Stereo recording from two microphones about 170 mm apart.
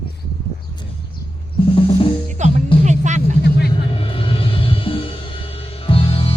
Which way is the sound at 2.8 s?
45° right (ahead or behind).